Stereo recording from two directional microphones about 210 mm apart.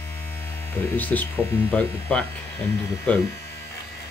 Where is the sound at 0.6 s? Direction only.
10° left (ahead or behind).